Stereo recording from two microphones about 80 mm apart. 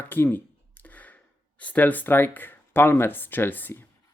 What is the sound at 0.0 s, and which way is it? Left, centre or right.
Speech, left.